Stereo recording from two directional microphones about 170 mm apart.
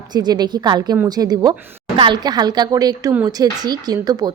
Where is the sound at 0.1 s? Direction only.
25° right (ahead or behind).